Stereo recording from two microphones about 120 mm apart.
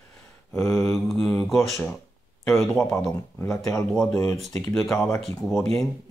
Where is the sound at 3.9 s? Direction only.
5° left (ahead or behind).